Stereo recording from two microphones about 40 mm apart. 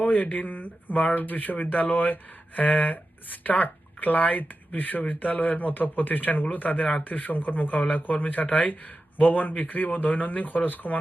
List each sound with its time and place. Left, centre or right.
0.0 s speech: left